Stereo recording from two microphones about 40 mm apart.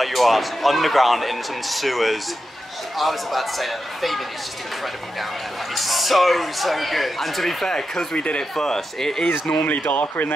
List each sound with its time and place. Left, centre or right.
0.0 s speech: centre
5.8 s speech: centre
9.5 s speech: left